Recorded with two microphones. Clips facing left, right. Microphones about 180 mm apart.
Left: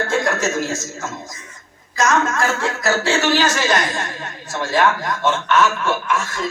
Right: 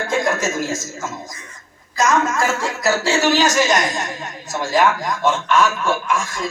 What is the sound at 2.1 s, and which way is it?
A man's voice, 10° right (ahead or behind).